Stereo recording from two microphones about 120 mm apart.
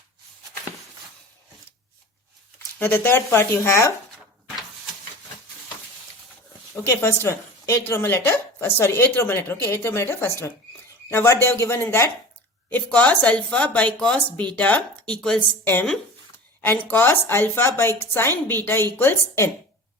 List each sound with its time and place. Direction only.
2.7 s speech: 15° left (ahead or behind)
6.8 s a woman's voice: 20° left (ahead or behind)